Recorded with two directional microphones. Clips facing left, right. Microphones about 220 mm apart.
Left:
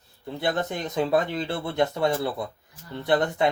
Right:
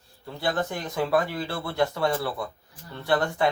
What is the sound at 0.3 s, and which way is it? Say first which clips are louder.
Speech: left 1 dB; 20° left (ahead or behind).